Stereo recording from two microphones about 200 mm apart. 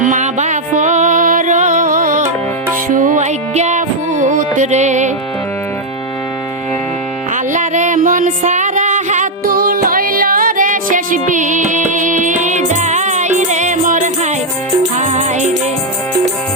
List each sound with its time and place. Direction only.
0.0 s music: 40° right (ahead or behind)
7.5 s a sound: 35° right (ahead or behind)
14.9 s music: 35° right (ahead or behind)